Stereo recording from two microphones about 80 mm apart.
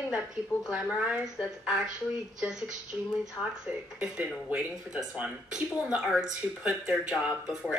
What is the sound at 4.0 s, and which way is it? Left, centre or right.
Speech, centre.